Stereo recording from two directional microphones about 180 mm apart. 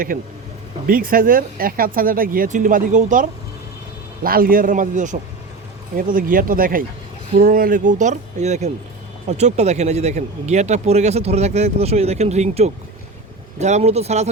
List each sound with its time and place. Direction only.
0.1 s speech: 55° right (ahead or behind); by 14.3 s 35° right (ahead or behind)